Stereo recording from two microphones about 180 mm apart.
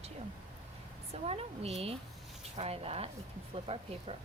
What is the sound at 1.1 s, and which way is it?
Speech, 35° right (ahead or behind).